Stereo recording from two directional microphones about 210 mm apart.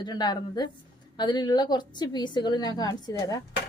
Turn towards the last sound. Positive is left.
turn(degrees=15)  # may be behind; listen again after turning